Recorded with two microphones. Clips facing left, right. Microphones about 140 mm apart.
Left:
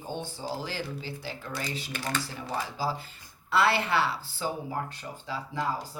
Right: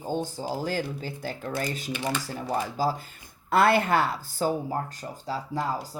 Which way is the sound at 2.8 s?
45° right (ahead or behind).